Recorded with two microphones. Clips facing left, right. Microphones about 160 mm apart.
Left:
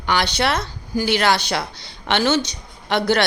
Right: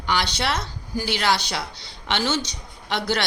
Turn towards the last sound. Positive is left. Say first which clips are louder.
# left 6 dB
turn(degrees=55)  # may be behind; listen again after turning